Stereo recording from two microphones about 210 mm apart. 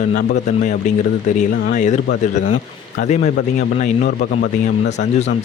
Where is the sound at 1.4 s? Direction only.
35° left (ahead or behind).